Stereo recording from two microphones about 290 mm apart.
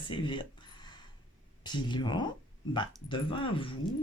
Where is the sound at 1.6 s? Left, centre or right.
Centre.